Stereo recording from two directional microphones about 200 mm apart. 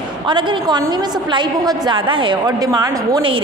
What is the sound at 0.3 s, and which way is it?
A woman's voice, 25° right (ahead or behind).